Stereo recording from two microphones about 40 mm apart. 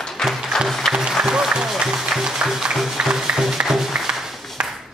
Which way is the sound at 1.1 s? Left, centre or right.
Centre.